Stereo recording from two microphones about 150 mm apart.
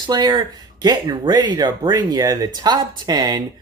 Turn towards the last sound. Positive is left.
turn(degrees=-25)  # may be behind; listen again after turning